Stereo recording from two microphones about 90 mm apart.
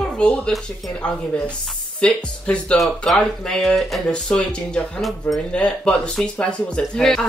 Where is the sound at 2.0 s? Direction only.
10° left (ahead or behind).